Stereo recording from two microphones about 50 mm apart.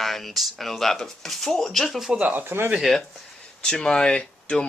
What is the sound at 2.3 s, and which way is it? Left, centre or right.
Speech, right.